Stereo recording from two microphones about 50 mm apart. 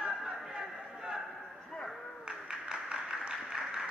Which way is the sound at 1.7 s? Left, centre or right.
Centre.